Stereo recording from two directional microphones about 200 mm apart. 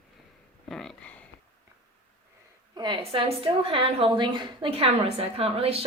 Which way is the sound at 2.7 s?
25° right (ahead or behind).